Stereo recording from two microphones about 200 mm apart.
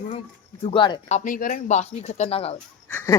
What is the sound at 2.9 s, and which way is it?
Wheeze, 15° left (ahead or behind).